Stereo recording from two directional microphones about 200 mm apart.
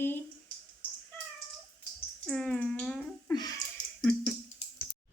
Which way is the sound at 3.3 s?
20° left (ahead or behind).